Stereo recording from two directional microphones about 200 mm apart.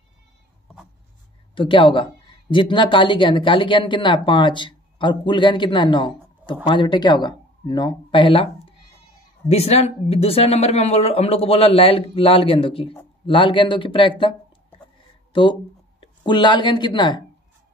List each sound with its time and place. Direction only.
1.5 s speech: 25° left (ahead or behind)
9.5 s speech: 30° left (ahead or behind)